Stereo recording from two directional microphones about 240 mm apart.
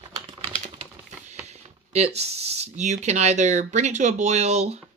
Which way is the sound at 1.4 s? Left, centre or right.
Right.